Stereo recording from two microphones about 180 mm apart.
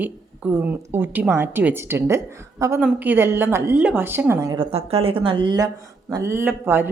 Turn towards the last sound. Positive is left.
turn(degrees=-10)  # may be behind; listen again after turning